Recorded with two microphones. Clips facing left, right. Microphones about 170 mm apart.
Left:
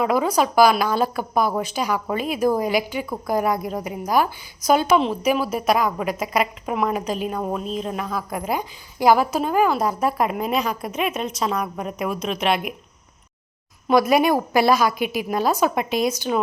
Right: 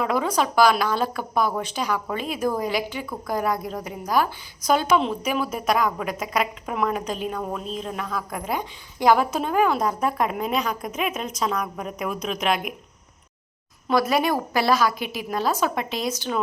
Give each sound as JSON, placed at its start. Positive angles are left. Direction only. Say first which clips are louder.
{"t": 0.0, "sound": "a woman's voice", "louder": "left 3 dB", "side_deg": 10}
{"t": 13.8, "sound": "speech", "louder": "left 4 dB", "side_deg": 10}